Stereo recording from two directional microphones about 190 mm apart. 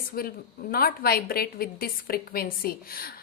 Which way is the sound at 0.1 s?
50° left (ahead or behind).